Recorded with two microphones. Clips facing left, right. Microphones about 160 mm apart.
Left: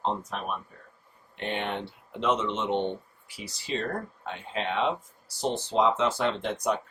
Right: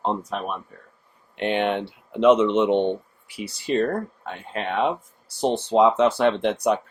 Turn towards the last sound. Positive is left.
turn(degrees=-70)  # may be behind; listen again after turning